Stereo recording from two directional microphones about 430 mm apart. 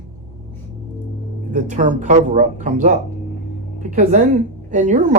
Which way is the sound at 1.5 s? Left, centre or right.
Centre.